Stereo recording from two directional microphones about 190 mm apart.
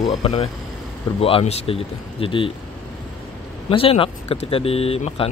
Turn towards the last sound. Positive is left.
turn(degrees=30)  # may be behind; listen again after turning